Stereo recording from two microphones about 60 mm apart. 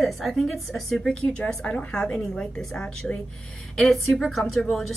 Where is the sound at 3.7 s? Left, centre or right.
Centre.